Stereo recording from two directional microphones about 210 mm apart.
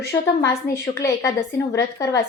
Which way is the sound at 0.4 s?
15° left (ahead or behind).